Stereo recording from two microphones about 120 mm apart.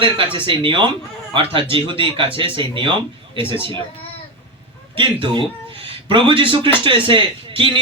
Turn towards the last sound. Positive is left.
turn(degrees=-45)  # may be behind; listen again after turning